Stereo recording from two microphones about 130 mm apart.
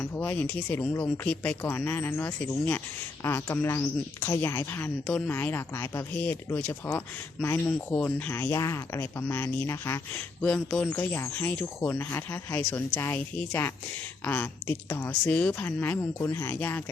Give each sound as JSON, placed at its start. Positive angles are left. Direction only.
{"t": 0.0, "sound": "speech", "side_deg": 15}
{"t": 10.4, "sound": "speech", "side_deg": 5}